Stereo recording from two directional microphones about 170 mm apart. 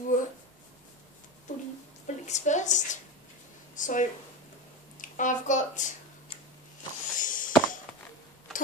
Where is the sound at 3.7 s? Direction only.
50° left (ahead or behind).